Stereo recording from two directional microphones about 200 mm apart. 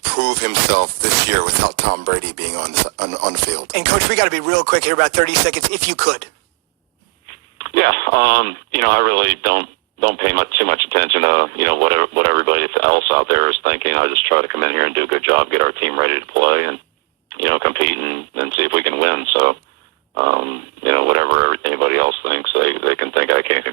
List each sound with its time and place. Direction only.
0.0 s speech: 55° right (ahead or behind)
7.6 s speech: 50° right (ahead or behind)